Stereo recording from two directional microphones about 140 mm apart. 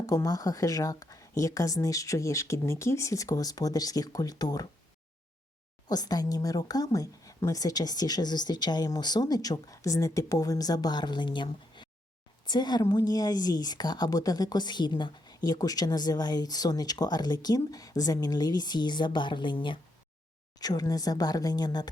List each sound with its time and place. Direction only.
0.0 s a woman's voice: 20° left (ahead or behind)
5.9 s a woman's voice: 30° left (ahead or behind)